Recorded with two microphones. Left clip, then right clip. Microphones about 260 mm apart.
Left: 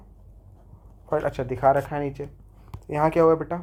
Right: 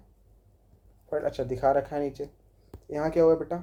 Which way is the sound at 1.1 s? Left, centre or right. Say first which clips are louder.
Left 4 dB; left.